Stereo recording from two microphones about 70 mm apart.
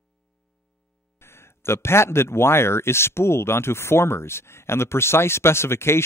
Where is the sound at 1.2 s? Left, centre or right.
Left.